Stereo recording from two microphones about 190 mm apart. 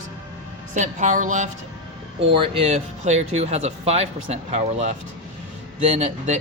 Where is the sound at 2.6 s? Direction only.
35° right (ahead or behind).